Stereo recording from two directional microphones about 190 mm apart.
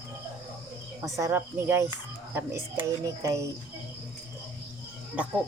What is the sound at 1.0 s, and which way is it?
Speech, 15° right (ahead or behind).